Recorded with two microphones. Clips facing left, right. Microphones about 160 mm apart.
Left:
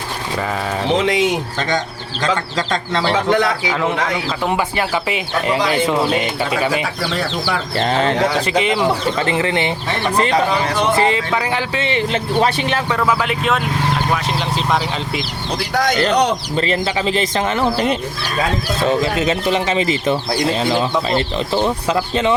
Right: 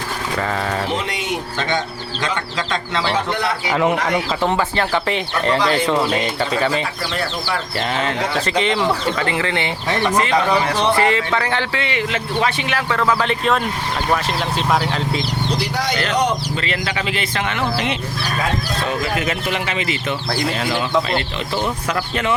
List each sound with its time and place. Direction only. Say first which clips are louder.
0.9 s chicken: left 8 dB; 90° left
2.2 s speech: left 5 dB; 40° left (ahead or behind)
3.2 s chicken: left 6 dB; 90° left
4.4 s speech: left 3 dB; 10° left (ahead or behind)
7.8 s speech: left 6 dB; 35° left (ahead or behind)
8.4 s speech: left 2 dB; 10° left (ahead or behind)
10.9 s speech: left 1 dB; 20° left (ahead or behind)
12.9 s speech: right 2 dB; 10° left (ahead or behind)
15.5 s speech: left 8 dB; 50° left (ahead or behind)
16.6 s speech: left 5 dB; 35° left (ahead or behind)
18.9 s speech: left 6 dB; 25° left (ahead or behind)